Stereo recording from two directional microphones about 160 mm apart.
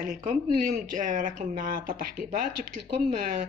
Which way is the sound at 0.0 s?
50° right (ahead or behind).